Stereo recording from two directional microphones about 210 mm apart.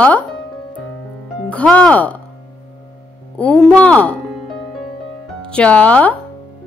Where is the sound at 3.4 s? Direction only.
5° left (ahead or behind).